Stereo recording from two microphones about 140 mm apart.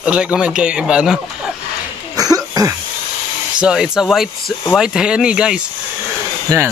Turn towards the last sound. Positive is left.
turn(degrees=-25)  # may be behind; listen again after turning